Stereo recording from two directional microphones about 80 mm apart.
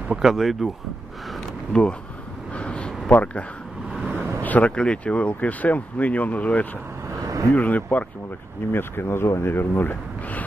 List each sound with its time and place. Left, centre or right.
0.1 s speech: centre
1.7 s speech: centre
2.5 s a sound: centre
4.0 s vehicle: right
4.4 s speech: centre
7.2 s a sound: right
7.5 s speech: centre
8.7 s speech: left